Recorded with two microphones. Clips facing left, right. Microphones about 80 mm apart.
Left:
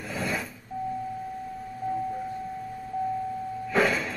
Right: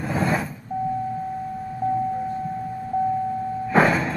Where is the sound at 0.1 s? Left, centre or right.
Right.